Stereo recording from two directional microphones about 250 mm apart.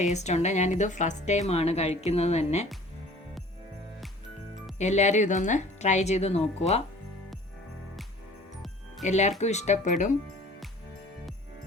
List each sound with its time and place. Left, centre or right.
0.0 s a woman's voice: left
4.8 s a woman's voice: left
9.0 s a woman's voice: left